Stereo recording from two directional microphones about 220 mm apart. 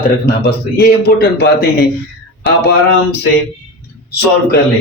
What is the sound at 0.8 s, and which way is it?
Speech, 45° left (ahead or behind).